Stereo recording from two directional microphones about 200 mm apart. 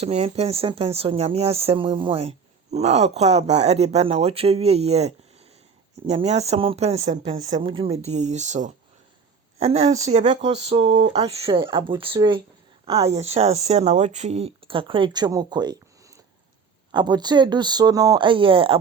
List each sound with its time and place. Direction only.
0.0 s speech: 30° right (ahead or behind)
7.5 s speech: 25° right (ahead or behind)
12.8 s a sound: 30° right (ahead or behind)
13.1 s speech: 30° right (ahead or behind)
16.9 s speech: 20° right (ahead or behind)